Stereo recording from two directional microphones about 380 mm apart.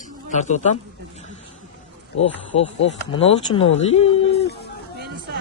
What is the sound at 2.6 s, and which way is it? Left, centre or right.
Speech, left.